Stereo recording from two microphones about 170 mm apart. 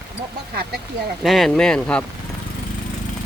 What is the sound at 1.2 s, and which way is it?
Speech, centre (ahead or behind).